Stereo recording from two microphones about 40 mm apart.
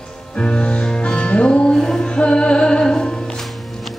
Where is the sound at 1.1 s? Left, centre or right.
Left.